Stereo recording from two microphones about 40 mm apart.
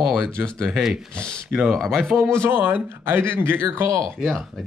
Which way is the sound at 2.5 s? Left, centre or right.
Right.